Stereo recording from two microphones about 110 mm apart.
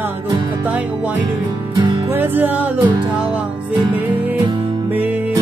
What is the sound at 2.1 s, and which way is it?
Music, 15° right (ahead or behind).